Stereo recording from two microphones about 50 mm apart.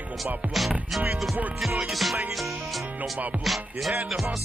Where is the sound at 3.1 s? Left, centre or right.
Right.